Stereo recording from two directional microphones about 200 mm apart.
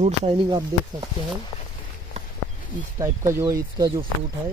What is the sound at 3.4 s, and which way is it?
Speech, 20° right (ahead or behind).